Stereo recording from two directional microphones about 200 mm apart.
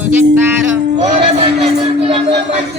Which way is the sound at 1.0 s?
35° right (ahead or behind).